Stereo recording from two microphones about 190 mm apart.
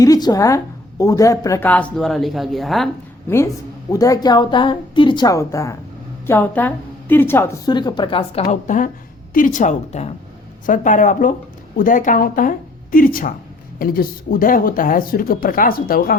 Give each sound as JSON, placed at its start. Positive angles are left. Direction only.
{"t": 0.0, "sound": "a woman's voice", "side_deg": 20}
{"t": 3.2, "sound": "a woman's voice", "side_deg": 15}